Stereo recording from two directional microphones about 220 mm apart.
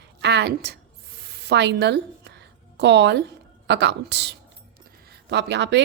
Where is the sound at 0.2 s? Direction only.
50° right (ahead or behind).